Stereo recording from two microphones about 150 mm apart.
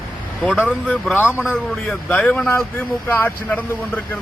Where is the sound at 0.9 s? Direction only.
10° left (ahead or behind).